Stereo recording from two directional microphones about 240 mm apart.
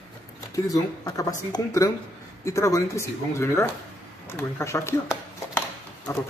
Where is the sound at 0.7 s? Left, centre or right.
Centre.